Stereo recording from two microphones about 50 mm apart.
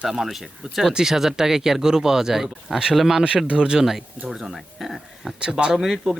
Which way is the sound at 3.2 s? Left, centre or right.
Right.